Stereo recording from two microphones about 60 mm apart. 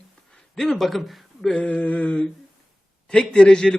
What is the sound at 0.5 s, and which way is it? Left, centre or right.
A man's voice, centre.